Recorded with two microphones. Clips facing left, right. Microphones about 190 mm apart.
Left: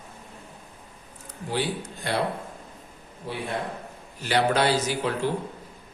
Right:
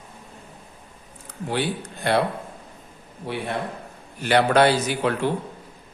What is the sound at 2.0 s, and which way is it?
Speech, 65° right (ahead or behind).